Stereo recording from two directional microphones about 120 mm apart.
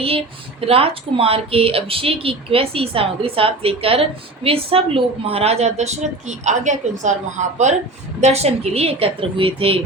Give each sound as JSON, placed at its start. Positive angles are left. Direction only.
{"t": 0.7, "sound": "a woman's voice", "side_deg": -50}
{"t": 8.2, "sound": "speech", "side_deg": -60}